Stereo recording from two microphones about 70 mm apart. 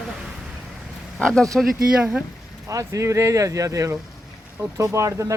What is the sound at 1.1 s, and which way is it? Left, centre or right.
Speech, centre.